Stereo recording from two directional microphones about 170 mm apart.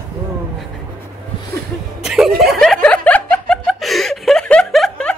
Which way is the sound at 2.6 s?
5° left (ahead or behind).